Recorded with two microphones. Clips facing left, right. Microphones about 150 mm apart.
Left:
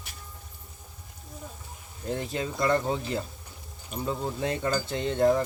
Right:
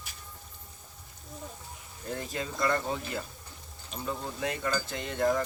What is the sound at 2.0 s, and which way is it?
Cutlery, 25° left (ahead or behind).